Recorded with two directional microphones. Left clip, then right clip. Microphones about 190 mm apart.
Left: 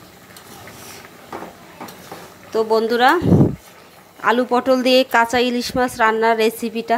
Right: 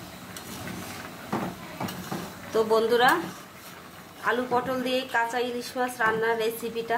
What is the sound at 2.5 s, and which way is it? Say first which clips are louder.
Speech: left 5 dB; 35° left (ahead or behind).